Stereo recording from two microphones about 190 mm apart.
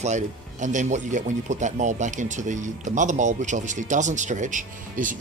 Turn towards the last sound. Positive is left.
turn(degrees=-45)  # may be behind; listen again after turning